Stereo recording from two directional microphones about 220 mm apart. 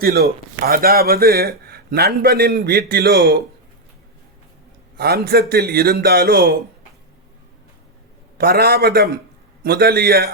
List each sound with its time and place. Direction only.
0.0 s speech: 45° right (ahead or behind)
4.9 s speech: 45° right (ahead or behind)
8.4 s speech: 45° right (ahead or behind)